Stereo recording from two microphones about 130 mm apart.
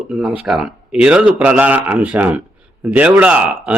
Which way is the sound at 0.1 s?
5° right (ahead or behind).